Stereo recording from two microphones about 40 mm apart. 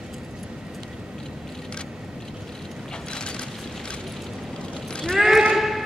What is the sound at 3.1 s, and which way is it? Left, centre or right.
Vehicle, left.